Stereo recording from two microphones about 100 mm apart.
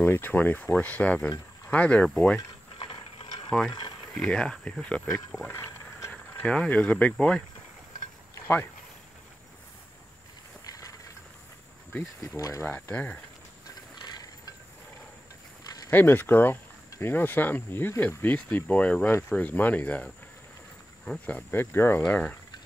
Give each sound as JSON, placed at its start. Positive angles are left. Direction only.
{"t": 0.0, "sound": "speech", "side_deg": 20}
{"t": 2.8, "sound": "ratchet", "side_deg": 65}
{"t": 3.4, "sound": "speech", "side_deg": 5}
{"t": 5.5, "sound": "a sound", "side_deg": 25}
{"t": 6.4, "sound": "speech", "side_deg": 5}
{"t": 10.6, "sound": "a sound", "side_deg": 35}
{"t": 11.9, "sound": "speech", "side_deg": 10}
{"t": 12.4, "sound": "speech", "side_deg": 30}
{"t": 12.6, "sound": "speech", "side_deg": 20}
{"t": 14.0, "sound": "mechanisms", "side_deg": 45}
{"t": 15.9, "sound": "speech", "side_deg": 20}
{"t": 21.4, "sound": "speech", "side_deg": 20}